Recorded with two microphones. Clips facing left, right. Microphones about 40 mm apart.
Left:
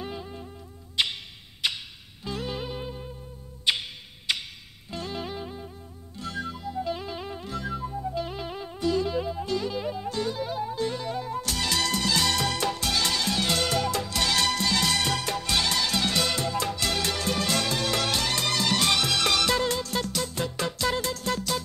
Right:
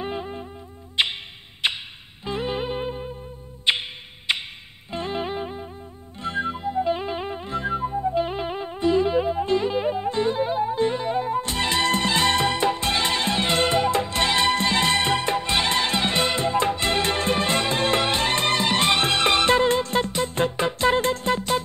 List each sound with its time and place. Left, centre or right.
0.0 s music: right